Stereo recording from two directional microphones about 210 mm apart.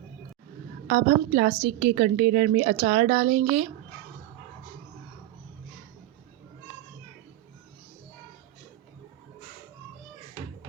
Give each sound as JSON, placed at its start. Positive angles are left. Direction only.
{"t": 0.9, "sound": "a woman's voice", "side_deg": -45}